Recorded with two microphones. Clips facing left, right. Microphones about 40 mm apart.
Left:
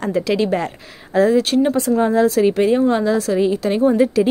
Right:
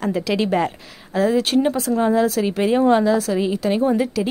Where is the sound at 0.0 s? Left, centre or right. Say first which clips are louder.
Left 3 dB; centre.